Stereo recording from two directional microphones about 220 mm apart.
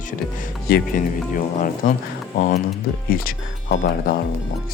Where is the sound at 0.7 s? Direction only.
45° left (ahead or behind).